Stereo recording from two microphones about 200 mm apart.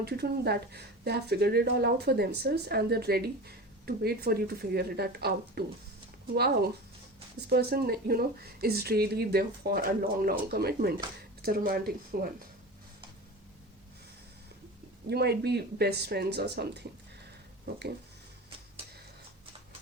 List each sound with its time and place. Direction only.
0.0 s speech: 55° right (ahead or behind)
15.0 s speech: 55° right (ahead or behind)